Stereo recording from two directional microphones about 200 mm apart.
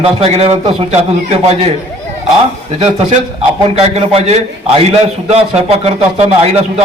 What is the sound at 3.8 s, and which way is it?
A man's voice, 30° right (ahead or behind).